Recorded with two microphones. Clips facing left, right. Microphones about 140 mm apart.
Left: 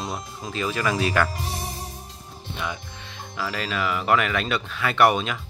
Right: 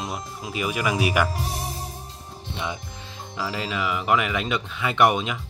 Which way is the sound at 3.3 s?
20° right (ahead or behind).